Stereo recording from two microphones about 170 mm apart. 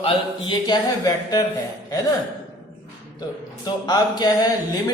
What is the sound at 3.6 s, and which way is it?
Speech, 25° left (ahead or behind).